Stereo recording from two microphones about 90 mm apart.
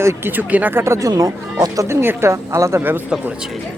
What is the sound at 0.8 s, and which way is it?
Speech, 30° right (ahead or behind).